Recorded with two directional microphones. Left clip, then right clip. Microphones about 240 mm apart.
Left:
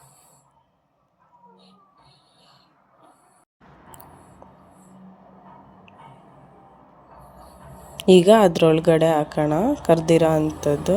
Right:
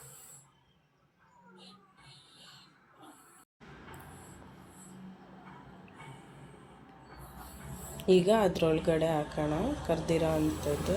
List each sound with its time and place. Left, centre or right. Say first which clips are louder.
7.9 s a woman's voice: left 12 dB; left